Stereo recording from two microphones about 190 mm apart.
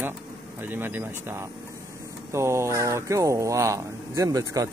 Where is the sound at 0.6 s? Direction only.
10° right (ahead or behind).